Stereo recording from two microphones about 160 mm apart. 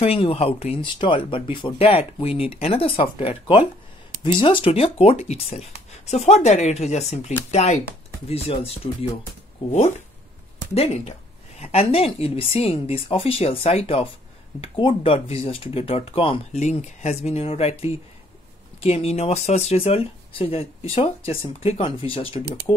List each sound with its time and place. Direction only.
0.0 s speech: 35° left (ahead or behind)